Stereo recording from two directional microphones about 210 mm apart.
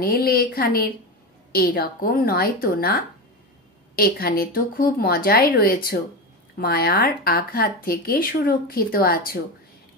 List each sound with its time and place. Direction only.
0.0 s speech: 45° left (ahead or behind)